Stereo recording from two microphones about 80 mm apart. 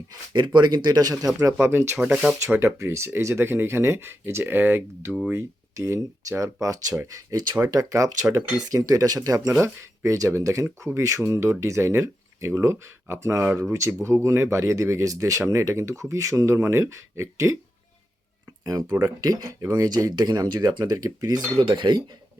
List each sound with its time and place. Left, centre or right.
0.1 s speech: right
1.5 s speech: right
9.6 s speech: right
18.6 s speech: right
19.5 s speech: right
20.9 s speech: right
21.6 s speech: right